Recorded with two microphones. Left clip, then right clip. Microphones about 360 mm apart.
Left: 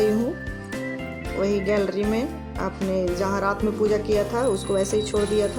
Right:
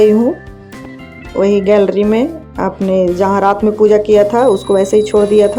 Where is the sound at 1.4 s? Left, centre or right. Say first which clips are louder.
Right 13 dB; left.